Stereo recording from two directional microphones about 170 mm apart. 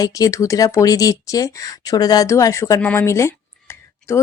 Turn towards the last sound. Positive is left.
turn(degrees=15)  # may be behind; listen again after turning